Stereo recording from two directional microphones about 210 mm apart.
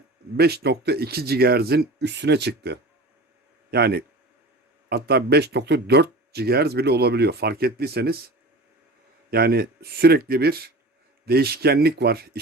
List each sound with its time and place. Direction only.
0.3 s speech: 50° right (ahead or behind)
9.3 s speech: 45° right (ahead or behind)